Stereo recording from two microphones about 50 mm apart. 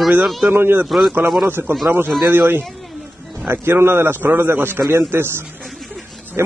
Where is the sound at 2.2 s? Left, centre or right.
Right.